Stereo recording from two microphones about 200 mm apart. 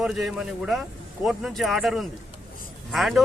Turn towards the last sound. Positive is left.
turn(degrees=0)  # may be behind; listen again after turning